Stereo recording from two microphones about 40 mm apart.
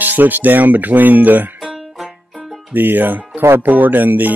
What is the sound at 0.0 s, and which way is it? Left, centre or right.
Speech, right.